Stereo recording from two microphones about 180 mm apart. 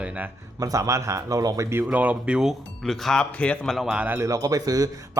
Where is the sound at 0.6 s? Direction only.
20° right (ahead or behind).